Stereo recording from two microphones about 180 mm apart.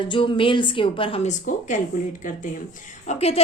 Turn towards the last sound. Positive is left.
turn(degrees=35)  # may be behind; listen again after turning